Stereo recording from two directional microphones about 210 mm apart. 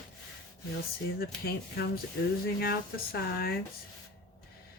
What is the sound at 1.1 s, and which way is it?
Speech, 45° left (ahead or behind).